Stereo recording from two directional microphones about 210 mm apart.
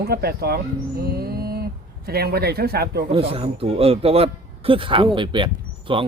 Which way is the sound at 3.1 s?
25° right (ahead or behind).